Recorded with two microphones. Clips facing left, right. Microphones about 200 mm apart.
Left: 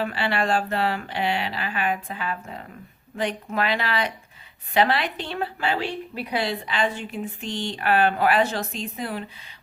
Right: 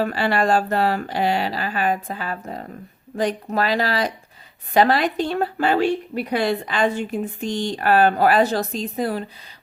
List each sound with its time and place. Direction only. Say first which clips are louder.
0.0 s speech: right 5 dB; 40° right (ahead or behind)